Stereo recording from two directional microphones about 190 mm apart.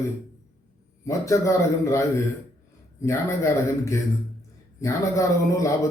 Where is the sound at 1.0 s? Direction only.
15° left (ahead or behind).